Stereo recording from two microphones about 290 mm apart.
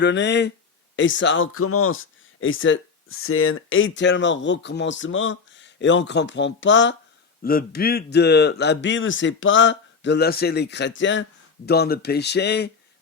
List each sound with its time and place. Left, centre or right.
0.0 s speech: left